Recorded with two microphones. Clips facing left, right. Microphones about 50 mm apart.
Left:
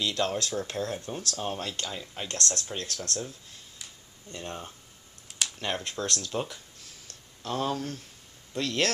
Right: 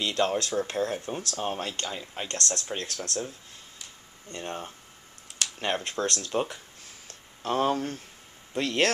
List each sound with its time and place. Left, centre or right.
0.0 s speech: centre
4.4 s speech: centre
7.1 s a sound: right
8.5 s speech: centre